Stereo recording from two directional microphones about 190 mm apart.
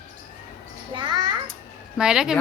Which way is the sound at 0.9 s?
25° right (ahead or behind).